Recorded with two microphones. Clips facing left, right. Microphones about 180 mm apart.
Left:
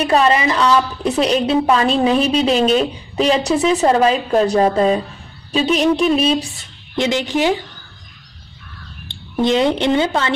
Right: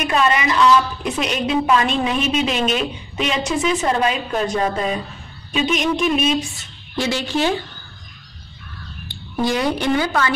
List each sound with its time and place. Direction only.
0.0 s a woman's voice: 35° left (ahead or behind)
7.0 s speech: 20° left (ahead or behind)
9.0 s a woman's voice: 25° left (ahead or behind)